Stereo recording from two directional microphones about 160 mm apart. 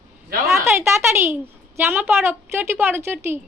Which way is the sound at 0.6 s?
15° right (ahead or behind).